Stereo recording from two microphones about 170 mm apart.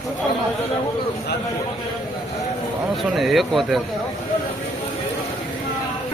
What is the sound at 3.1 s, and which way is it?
Speech, centre (ahead or behind).